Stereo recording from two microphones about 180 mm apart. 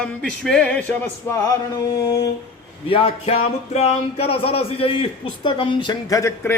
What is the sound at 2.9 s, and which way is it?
A man's voice, 35° left (ahead or behind).